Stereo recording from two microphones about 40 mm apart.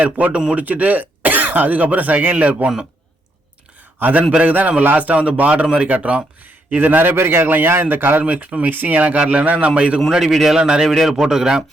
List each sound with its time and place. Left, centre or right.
0.0 s speech: right
4.0 s speech: right
6.7 s a man's voice: right
7.4 s a man's voice: right
8.2 s speech: right
10.1 s speech: centre
10.6 s speech: right
10.8 s a man's voice: centre
11.2 s speech: centre